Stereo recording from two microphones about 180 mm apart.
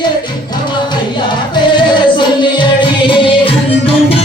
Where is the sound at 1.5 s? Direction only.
25° left (ahead or behind).